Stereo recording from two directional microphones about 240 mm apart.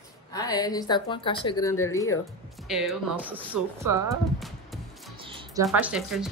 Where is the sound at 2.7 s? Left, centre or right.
Centre.